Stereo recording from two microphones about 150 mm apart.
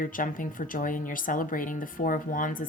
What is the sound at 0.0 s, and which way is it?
A woman's voice, 65° left (ahead or behind).